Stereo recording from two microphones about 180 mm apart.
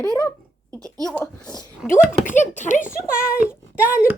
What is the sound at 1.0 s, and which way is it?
Speech, 5° left (ahead or behind).